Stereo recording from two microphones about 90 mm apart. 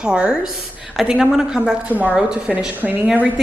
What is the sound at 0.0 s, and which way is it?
A woman's voice, 10° right (ahead or behind).